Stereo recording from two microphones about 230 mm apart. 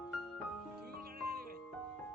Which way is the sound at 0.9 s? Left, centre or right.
Right.